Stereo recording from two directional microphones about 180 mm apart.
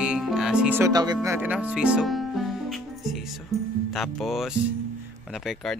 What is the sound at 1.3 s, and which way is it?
Music, 10° right (ahead or behind).